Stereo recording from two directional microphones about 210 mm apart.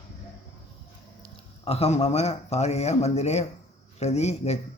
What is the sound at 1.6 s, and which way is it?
Speech, 30° left (ahead or behind).